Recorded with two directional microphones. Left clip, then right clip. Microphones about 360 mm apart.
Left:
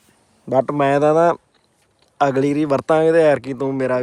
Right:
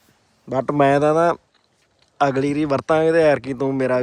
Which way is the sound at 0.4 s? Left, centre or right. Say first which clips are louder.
Left 1 dB; centre.